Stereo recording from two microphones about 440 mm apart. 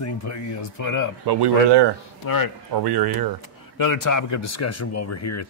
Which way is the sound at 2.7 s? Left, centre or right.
Right.